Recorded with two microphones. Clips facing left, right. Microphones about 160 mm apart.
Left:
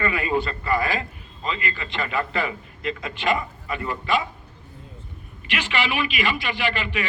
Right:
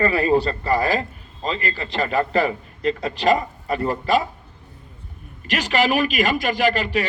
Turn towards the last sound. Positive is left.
turn(degrees=-40)  # may be behind; listen again after turning